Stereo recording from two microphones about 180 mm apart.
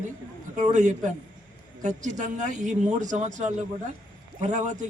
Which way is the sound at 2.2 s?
45° right (ahead or behind).